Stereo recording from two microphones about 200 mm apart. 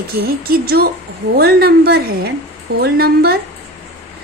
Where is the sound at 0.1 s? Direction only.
50° right (ahead or behind).